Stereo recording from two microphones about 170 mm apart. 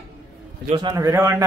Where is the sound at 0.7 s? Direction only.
20° right (ahead or behind).